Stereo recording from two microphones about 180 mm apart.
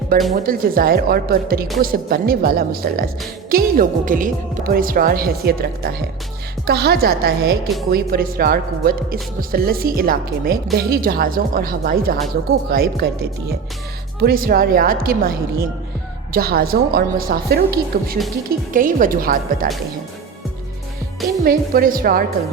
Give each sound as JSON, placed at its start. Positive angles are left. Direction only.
{"t": 0.1, "sound": "a woman's voice", "side_deg": -55}
{"t": 14.2, "sound": "a woman's voice", "side_deg": -55}
{"t": 21.4, "sound": "speech", "side_deg": -55}